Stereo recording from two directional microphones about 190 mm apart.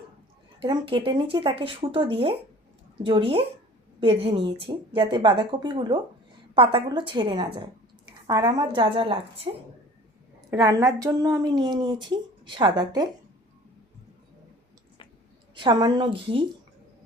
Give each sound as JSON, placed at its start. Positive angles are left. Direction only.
{"t": 0.6, "sound": "a woman's voice", "side_deg": -25}
{"t": 10.5, "sound": "a woman's voice", "side_deg": -15}
{"t": 15.5, "sound": "a woman's voice", "side_deg": -25}